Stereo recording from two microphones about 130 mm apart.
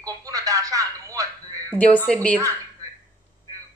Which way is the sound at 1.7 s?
10° left (ahead or behind).